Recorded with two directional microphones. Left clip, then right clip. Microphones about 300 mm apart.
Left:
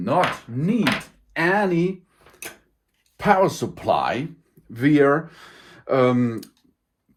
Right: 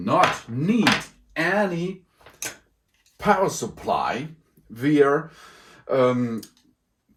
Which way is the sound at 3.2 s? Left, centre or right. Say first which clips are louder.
Left 3 dB; left.